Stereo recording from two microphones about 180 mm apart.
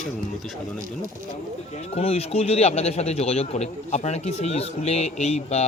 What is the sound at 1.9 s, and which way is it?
A man's voice, 35° left (ahead or behind).